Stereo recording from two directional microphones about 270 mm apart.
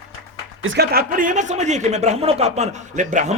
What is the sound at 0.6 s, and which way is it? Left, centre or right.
Speech, right.